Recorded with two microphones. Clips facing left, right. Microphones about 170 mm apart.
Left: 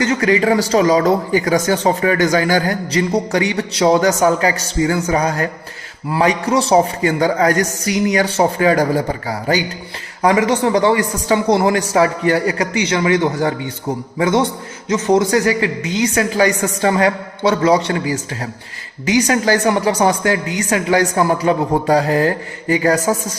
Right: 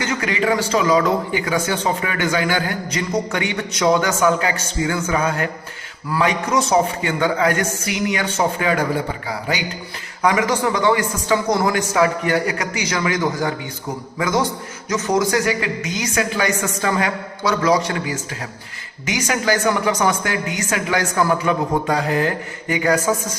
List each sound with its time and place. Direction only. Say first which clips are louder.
0.0 s speech: left 6 dB; 35° left (ahead or behind)
10.2 s a man's voice: left 4 dB; 30° left (ahead or behind)